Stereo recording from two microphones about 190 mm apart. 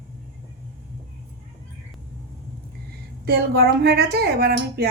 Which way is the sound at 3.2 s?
55° right (ahead or behind).